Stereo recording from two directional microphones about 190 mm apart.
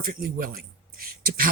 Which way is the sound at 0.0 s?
50° right (ahead or behind).